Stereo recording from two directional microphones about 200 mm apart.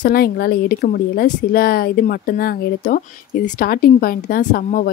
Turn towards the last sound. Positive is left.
turn(degrees=40)  # may be behind; listen again after turning